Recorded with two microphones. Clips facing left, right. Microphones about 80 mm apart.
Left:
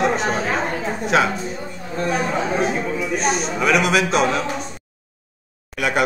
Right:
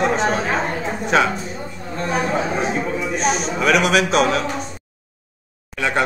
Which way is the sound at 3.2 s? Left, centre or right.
Centre.